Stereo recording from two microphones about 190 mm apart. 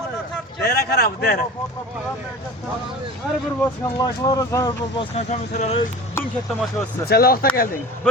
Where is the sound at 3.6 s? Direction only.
15° left (ahead or behind).